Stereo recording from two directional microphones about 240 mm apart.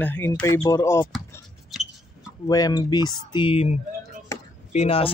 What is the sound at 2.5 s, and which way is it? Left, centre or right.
Speech, centre.